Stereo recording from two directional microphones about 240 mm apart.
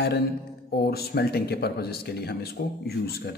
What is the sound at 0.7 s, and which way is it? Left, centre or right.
Speech, left.